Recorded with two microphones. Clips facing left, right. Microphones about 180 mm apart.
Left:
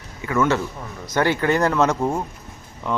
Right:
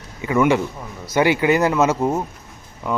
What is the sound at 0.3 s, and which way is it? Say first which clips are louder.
Speech: right 3 dB; 15° right (ahead or behind).